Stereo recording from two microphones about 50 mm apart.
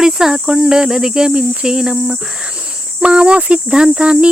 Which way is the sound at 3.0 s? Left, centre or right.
Right.